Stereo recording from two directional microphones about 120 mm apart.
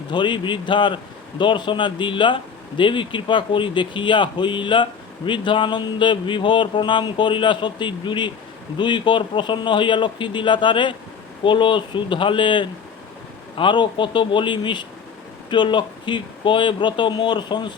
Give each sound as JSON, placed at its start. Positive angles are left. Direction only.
{"t": 0.1, "sound": "speech", "side_deg": 40}